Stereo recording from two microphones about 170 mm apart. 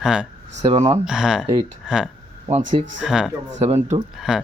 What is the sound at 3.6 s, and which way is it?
Speech, 40° right (ahead or behind).